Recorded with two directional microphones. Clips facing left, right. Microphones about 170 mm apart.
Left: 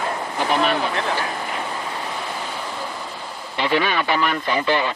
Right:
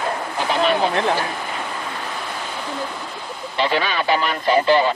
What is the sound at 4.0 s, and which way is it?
Speech, 40° right (ahead or behind).